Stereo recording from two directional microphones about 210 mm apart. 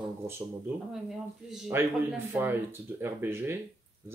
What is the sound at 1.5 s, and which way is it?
A man's voice, centre (ahead or behind).